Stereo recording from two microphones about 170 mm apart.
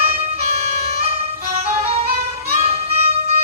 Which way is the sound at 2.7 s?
40° right (ahead or behind).